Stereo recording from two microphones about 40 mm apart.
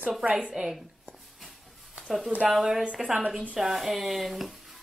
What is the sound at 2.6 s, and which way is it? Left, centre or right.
Speech, centre.